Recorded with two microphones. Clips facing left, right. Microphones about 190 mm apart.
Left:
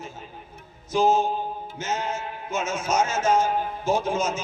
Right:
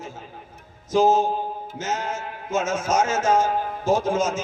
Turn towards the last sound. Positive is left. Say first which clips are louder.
# right 3 dB
turn(degrees=-45)  # may be behind; listen again after turning